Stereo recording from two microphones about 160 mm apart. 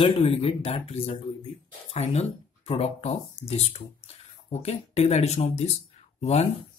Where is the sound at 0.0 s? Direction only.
35° left (ahead or behind).